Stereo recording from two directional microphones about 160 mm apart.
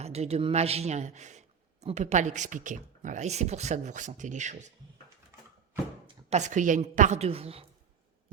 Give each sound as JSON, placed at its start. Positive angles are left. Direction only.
{"t": 0.0, "sound": "a man's voice", "side_deg": -40}
{"t": 6.3, "sound": "a man's voice", "side_deg": -50}